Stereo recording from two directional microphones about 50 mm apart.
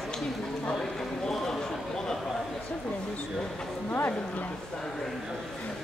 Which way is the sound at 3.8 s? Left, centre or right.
Left.